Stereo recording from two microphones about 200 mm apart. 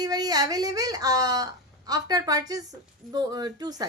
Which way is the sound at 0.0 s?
20° right (ahead or behind).